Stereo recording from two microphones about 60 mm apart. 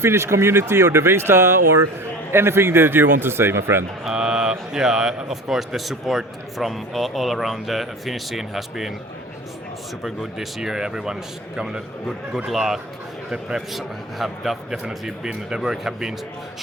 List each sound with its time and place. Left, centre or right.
0.0 s speech: right
4.0 s speech: centre
10.0 s a man's voice: centre